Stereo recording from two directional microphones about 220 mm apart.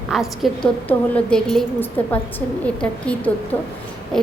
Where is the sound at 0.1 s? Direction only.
Centre (ahead or behind).